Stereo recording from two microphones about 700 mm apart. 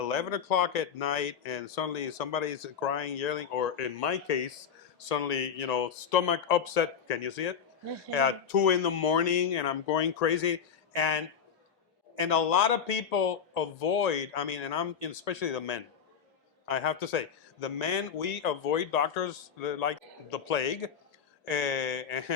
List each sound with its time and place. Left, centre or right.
0.1 s speech: left
12.2 s speech: left